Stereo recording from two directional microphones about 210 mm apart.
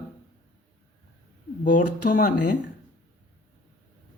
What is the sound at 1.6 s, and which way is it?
Speech, 45° left (ahead or behind).